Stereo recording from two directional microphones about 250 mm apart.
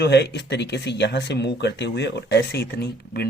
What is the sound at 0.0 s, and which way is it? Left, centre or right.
Speech, left.